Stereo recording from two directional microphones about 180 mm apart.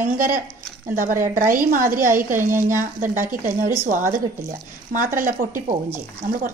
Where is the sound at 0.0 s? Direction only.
50° right (ahead or behind).